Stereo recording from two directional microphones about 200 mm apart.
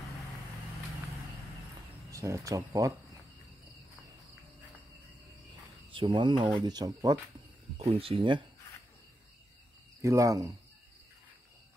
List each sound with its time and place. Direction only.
2.0 s speech: 15° right (ahead or behind)
5.9 s speech: 25° right (ahead or behind)
7.7 s speech: 30° right (ahead or behind)
10.0 s speech: 15° right (ahead or behind)